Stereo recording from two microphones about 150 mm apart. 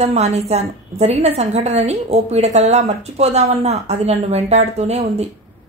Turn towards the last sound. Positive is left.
turn(degrees=-45)  # may be behind; listen again after turning